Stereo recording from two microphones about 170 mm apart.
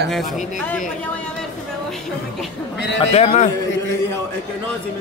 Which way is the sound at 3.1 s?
40° left (ahead or behind).